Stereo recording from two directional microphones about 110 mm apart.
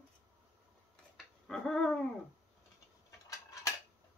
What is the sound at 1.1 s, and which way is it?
Dog, centre (ahead or behind).